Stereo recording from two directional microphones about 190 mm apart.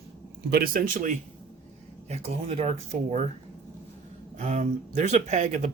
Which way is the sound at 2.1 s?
30° right (ahead or behind).